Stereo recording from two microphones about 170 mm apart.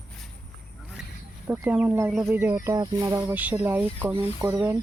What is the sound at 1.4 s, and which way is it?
Speech, 10° right (ahead or behind).